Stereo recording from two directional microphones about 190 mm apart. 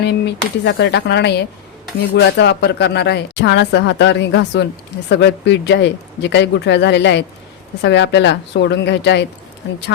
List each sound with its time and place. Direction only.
0.0 s speech: 65° left (ahead or behind)